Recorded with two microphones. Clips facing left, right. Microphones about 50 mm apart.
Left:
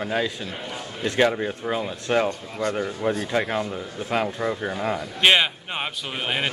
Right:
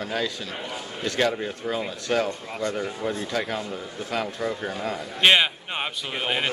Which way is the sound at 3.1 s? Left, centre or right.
Left.